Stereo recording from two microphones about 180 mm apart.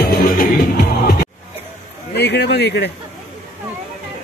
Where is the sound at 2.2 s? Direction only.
65° left (ahead or behind).